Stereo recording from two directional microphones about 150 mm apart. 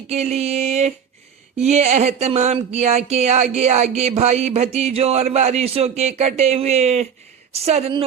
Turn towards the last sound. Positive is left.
turn(degrees=-45)  # may be behind; listen again after turning